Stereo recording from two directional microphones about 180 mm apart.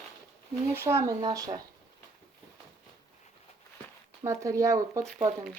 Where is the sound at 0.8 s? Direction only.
15° right (ahead or behind).